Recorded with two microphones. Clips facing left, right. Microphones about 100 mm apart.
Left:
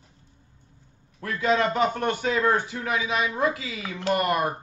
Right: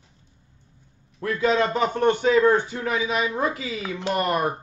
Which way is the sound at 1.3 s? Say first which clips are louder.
Right 1 dB; 25° right (ahead or behind).